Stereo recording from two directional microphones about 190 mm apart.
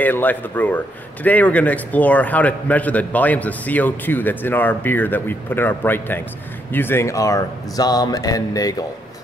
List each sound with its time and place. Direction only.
0.0 s speech: 10° left (ahead or behind)